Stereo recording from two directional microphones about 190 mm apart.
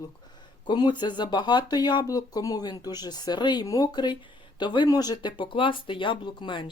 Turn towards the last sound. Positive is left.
turn(degrees=25)  # may be behind; listen again after turning